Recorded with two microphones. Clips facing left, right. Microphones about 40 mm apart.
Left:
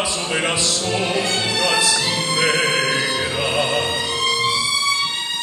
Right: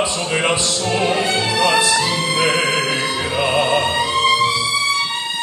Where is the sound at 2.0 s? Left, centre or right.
Centre.